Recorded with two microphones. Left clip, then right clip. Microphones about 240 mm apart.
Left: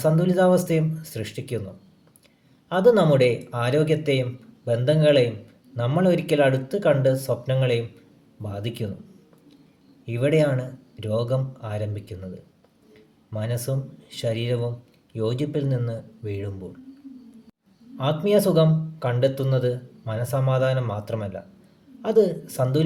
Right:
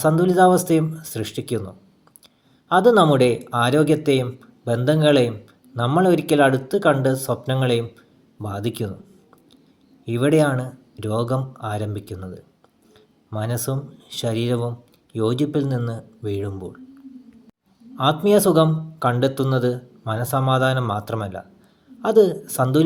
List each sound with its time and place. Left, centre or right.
0.0 s speech: right
2.6 s speech: right
10.1 s speech: right
17.9 s speech: right